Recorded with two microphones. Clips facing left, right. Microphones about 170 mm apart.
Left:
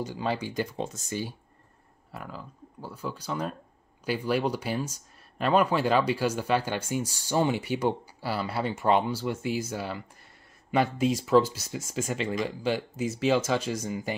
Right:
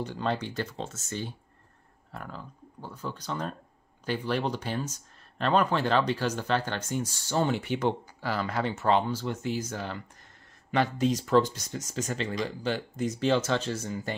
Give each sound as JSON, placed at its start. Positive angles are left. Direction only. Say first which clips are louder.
{"t": 0.0, "sound": "speech", "louder": "even", "side_deg": 10}